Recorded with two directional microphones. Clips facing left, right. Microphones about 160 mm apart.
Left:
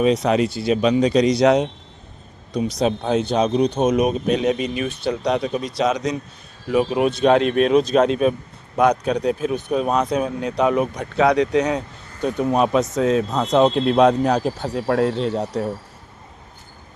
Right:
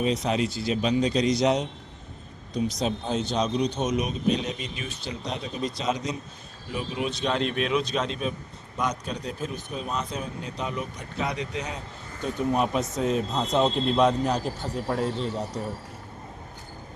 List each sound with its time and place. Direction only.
0.0 s a man's voice: 70° left (ahead or behind)
6.7 s a man's voice: 70° left (ahead or behind)